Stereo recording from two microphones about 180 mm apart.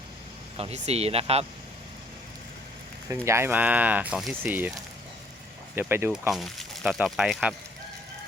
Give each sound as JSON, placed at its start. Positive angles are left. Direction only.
{"t": 0.5, "sound": "speech", "side_deg": -35}
{"t": 3.2, "sound": "speech", "side_deg": -15}
{"t": 5.7, "sound": "speech", "side_deg": -10}
{"t": 6.3, "sound": "speech", "side_deg": 0}